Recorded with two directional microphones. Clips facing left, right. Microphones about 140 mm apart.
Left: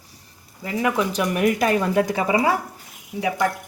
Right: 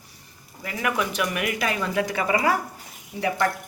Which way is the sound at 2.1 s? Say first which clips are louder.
Left 3 dB; 25° left (ahead or behind).